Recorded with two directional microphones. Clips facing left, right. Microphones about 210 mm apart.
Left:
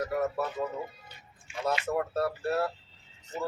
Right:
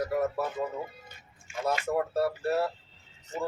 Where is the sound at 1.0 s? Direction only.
45° right (ahead or behind).